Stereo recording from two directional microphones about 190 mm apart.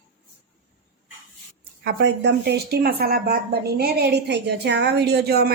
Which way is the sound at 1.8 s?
60° right (ahead or behind).